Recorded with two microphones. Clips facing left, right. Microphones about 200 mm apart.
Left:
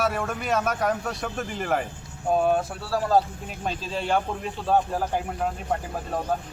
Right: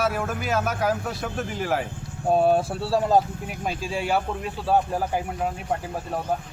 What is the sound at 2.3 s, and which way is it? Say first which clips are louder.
Speech: right 3 dB; 30° right (ahead or behind).